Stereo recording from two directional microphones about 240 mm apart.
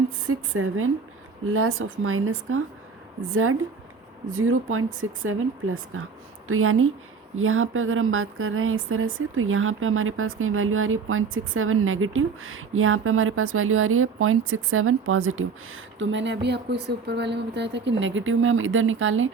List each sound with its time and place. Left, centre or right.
0.3 s speech: right